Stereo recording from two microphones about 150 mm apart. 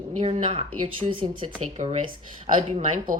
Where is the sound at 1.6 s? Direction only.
50° right (ahead or behind).